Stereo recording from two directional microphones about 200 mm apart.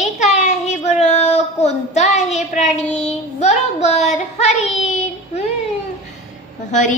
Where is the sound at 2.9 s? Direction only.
35° left (ahead or behind).